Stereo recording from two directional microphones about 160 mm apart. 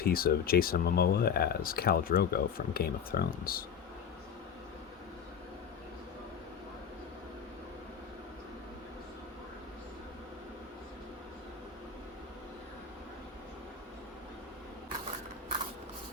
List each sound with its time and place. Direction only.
0.0 s speech: 70° left (ahead or behind)